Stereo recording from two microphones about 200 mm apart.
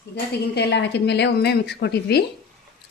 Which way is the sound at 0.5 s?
60° left (ahead or behind).